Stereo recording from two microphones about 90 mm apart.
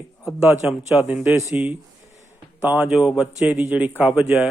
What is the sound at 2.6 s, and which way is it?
Speech, 20° right (ahead or behind).